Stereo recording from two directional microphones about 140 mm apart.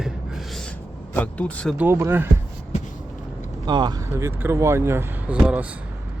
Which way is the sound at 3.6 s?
30° right (ahead or behind).